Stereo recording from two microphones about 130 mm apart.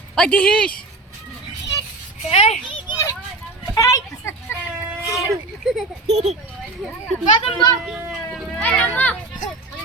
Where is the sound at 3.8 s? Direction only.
20° left (ahead or behind).